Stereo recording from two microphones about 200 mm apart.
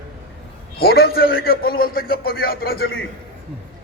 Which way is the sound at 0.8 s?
50° left (ahead or behind).